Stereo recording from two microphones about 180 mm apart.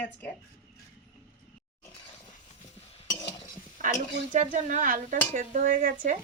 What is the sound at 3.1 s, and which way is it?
Cutlery, 20° left (ahead or behind).